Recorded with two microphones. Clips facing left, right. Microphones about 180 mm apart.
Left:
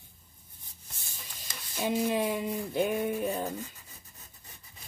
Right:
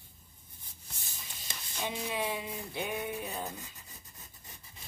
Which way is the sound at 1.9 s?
45° left (ahead or behind).